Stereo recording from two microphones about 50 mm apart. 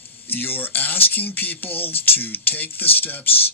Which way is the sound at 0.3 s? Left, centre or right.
Left.